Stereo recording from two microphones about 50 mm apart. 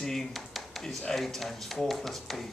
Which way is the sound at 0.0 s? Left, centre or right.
Centre.